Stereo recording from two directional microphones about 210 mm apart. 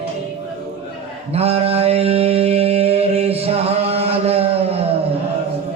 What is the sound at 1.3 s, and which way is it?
Mantra, 30° right (ahead or behind).